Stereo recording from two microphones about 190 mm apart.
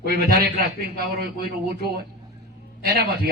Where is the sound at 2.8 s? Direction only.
60° right (ahead or behind).